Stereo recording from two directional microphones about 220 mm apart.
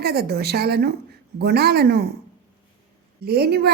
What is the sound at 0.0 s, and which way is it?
Speech, 45° right (ahead or behind).